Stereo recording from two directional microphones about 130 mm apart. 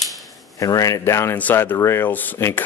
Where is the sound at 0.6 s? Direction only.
25° left (ahead or behind).